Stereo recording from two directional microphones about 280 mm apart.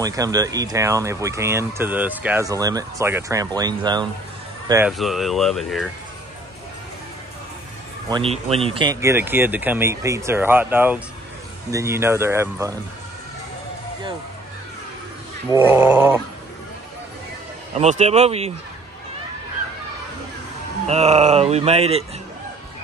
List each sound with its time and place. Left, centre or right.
0.0 s speech: centre
8.1 s speech: right
15.5 s speech: centre
17.7 s speech: right
20.9 s speech: right